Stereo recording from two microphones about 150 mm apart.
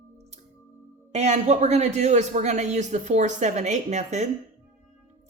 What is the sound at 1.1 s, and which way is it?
Speech, 50° right (ahead or behind).